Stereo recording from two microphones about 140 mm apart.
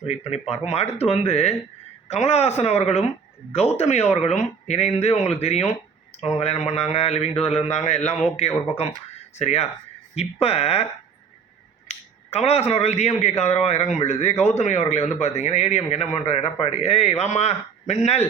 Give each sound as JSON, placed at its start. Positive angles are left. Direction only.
{"t": 0.4, "sound": "speech", "side_deg": 50}
{"t": 11.9, "sound": "speech", "side_deg": 45}